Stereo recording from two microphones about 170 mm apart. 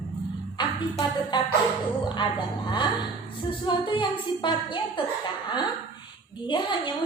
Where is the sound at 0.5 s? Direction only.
25° left (ahead or behind).